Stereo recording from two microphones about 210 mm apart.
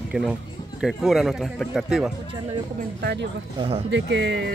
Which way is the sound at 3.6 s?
25° right (ahead or behind).